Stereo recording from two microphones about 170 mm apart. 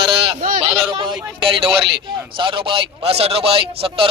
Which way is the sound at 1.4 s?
30° right (ahead or behind).